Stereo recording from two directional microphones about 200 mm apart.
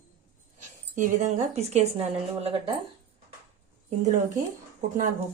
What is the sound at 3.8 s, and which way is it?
Speech, 35° right (ahead or behind).